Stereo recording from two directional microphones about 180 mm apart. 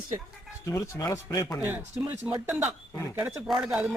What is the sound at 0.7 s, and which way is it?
Speech, 20° left (ahead or behind).